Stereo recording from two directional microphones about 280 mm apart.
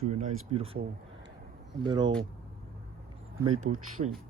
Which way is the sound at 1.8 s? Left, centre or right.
Centre.